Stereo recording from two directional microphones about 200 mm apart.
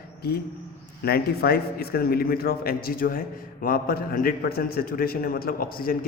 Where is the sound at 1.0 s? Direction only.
50° left (ahead or behind).